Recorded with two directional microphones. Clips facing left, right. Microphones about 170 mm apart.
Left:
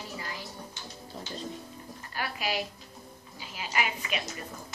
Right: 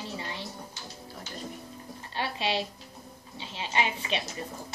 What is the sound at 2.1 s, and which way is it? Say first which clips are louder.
A woman's voice: right 2 dB; 25° right (ahead or behind).